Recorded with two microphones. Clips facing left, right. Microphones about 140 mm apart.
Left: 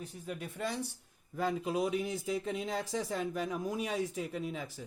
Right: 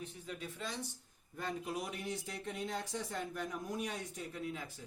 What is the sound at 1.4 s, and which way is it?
Speech, 90° left.